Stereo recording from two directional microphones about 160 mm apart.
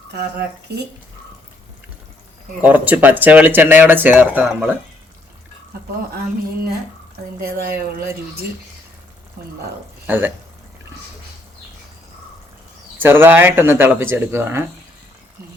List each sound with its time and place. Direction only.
0.1 s speech: 90° right
2.6 s speech: 10° right (ahead or behind)
7.4 s speech: 70° right (ahead or behind)
9.4 s speech: 80° right
10.1 s speech: 10° right (ahead or behind)
13.0 s speech: 15° right (ahead or behind)